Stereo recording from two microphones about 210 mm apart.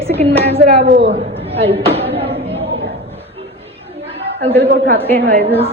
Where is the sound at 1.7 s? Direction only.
30° right (ahead or behind).